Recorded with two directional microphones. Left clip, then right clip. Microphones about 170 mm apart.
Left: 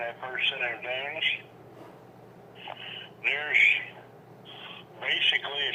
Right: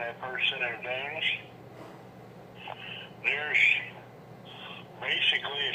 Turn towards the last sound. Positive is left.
turn(degrees=15)  # may be behind; listen again after turning